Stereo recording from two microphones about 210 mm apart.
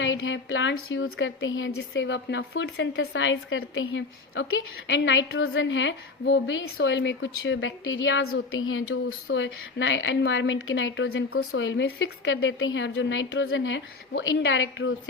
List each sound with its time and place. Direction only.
0.0 s a woman's voice: 65° left (ahead or behind)